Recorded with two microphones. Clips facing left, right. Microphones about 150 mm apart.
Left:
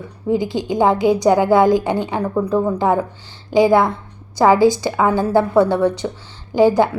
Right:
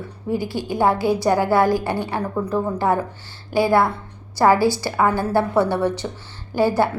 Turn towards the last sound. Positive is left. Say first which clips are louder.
# left 5 dB
turn(degrees=15)  # may be behind; listen again after turning